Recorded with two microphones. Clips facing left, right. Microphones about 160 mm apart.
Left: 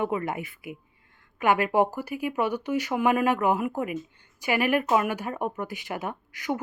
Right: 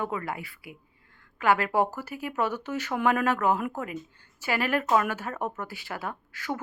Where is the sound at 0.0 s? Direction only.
20° left (ahead or behind).